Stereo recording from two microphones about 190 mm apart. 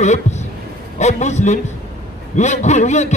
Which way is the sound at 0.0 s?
35° left (ahead or behind).